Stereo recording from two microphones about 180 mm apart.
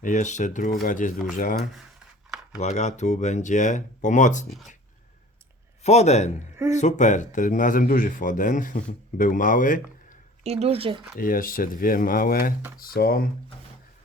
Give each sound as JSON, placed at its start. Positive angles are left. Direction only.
{"t": 0.0, "sound": "speech", "side_deg": 45}
{"t": 1.1, "sound": "speech", "side_deg": 0}
{"t": 1.4, "sound": "speech", "side_deg": 45}
{"t": 5.8, "sound": "a man's voice", "side_deg": 40}
{"t": 10.4, "sound": "speech", "side_deg": -35}
{"t": 11.2, "sound": "speech", "side_deg": 50}